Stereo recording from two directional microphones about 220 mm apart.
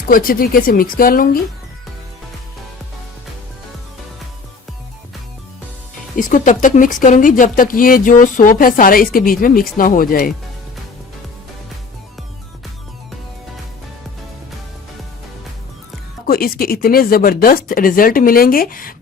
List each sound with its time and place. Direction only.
0.0 s speech: 40° left (ahead or behind)
6.1 s speech: 35° left (ahead or behind)
16.2 s speech: 40° left (ahead or behind)